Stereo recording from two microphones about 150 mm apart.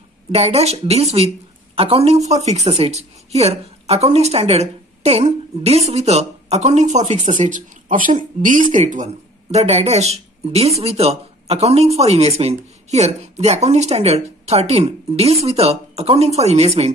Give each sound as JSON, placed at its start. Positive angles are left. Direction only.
{"t": 0.3, "sound": "a woman's voice", "side_deg": -45}